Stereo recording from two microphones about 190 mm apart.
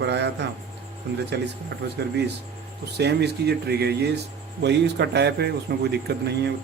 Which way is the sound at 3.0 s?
60° right (ahead or behind).